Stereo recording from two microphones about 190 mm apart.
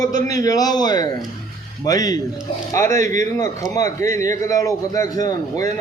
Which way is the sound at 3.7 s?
15° left (ahead or behind).